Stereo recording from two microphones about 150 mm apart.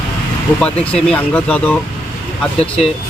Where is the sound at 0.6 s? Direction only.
5° left (ahead or behind).